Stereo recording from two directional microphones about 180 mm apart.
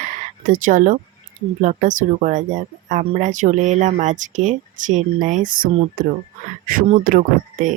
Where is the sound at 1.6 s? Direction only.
45° right (ahead or behind).